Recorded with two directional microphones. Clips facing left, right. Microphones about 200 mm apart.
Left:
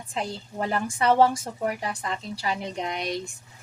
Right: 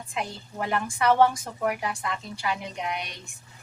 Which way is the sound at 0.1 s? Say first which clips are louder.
Left 2 dB; 35° left (ahead or behind).